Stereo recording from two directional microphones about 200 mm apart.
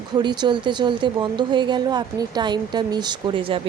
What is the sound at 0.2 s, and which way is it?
A woman's voice, 20° right (ahead or behind).